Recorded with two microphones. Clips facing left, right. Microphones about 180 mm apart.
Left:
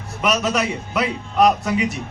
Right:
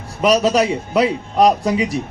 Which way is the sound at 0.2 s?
35° right (ahead or behind).